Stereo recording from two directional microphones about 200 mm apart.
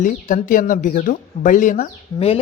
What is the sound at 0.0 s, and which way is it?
Speech, 40° left (ahead or behind).